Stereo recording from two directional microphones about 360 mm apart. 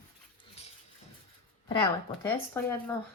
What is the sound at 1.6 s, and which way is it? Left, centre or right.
Speech, centre.